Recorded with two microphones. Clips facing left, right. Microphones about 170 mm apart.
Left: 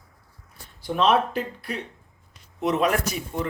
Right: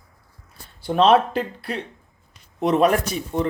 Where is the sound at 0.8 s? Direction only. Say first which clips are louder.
Right 5 dB; 30° right (ahead or behind).